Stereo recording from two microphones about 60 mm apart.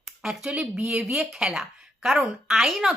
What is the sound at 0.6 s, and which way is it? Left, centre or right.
A woman's voice, centre.